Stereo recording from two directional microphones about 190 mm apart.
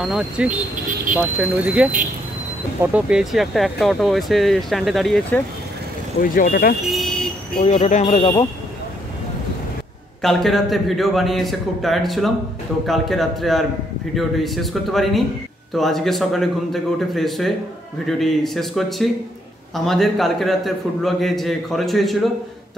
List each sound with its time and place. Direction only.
0.0 s speech: 5° right (ahead or behind)
6.2 s speech: 50° left (ahead or behind)
6.9 s a sound: centre (ahead or behind)
7.6 s speech: 35° left (ahead or behind)
10.2 s speech: centre (ahead or behind)